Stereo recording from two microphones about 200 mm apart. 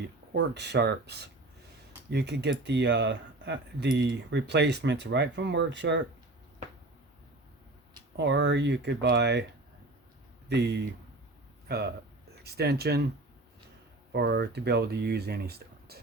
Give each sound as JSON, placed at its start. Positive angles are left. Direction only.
{"t": 0.3, "sound": "speech", "side_deg": -55}
{"t": 8.1, "sound": "speech", "side_deg": -60}
{"t": 10.5, "sound": "speech", "side_deg": -55}
{"t": 14.1, "sound": "speech", "side_deg": -55}